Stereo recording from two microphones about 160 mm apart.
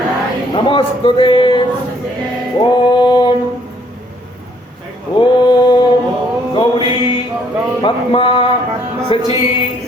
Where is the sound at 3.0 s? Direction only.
30° left (ahead or behind).